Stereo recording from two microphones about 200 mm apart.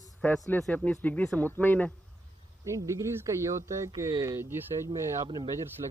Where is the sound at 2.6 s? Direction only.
15° right (ahead or behind).